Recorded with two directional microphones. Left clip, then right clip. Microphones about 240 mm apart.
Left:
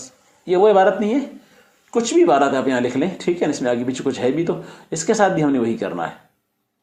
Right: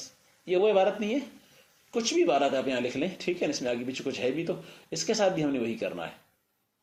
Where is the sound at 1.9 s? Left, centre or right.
Centre.